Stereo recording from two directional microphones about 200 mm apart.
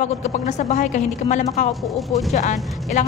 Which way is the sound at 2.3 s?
35° left (ahead or behind).